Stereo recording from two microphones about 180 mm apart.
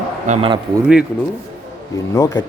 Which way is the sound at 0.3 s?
30° right (ahead or behind).